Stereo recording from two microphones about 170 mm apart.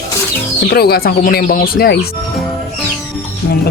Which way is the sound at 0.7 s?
70° left (ahead or behind).